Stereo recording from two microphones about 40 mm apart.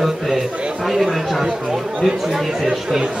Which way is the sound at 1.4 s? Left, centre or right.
Centre.